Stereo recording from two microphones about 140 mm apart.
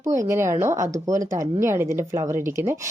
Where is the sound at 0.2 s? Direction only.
20° right (ahead or behind).